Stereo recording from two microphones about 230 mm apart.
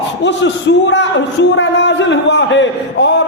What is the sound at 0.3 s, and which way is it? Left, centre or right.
A man's voice, left.